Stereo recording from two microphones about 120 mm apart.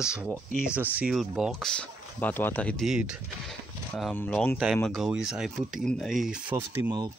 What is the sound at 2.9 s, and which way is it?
Speech, 5° right (ahead or behind).